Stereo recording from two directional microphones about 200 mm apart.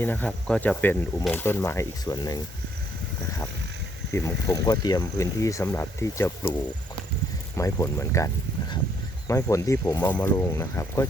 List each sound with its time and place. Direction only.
0.0 s speech: 10° left (ahead or behind)
4.1 s speech: 15° left (ahead or behind)
7.5 s speech: 15° left (ahead or behind)